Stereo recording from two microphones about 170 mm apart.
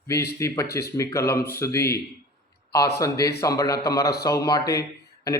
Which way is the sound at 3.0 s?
20° left (ahead or behind).